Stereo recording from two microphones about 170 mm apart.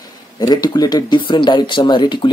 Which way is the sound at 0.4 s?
25° left (ahead or behind).